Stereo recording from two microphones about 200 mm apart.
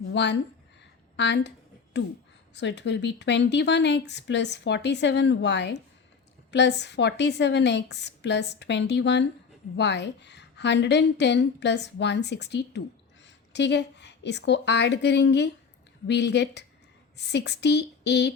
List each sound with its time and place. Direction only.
0.1 s speech: 60° left (ahead or behind)
1.1 s a sound: 60° left (ahead or behind)
2.6 s a woman's voice: 60° left (ahead or behind)